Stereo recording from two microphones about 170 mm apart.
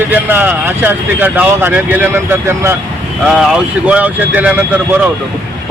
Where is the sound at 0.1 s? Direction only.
10° right (ahead or behind).